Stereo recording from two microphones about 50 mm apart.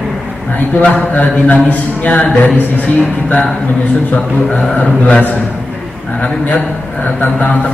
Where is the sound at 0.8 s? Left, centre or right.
Left.